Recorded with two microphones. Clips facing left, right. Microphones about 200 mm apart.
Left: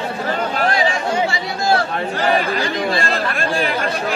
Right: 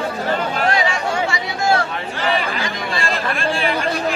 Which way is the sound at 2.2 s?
40° left (ahead or behind).